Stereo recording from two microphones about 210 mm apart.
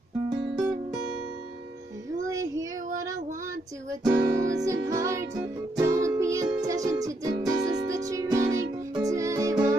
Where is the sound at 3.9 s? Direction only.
15° right (ahead or behind).